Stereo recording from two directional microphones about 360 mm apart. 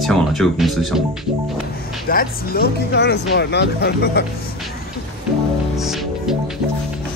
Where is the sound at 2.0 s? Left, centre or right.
Left.